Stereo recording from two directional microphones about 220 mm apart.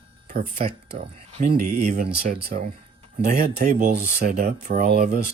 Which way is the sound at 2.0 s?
45° right (ahead or behind).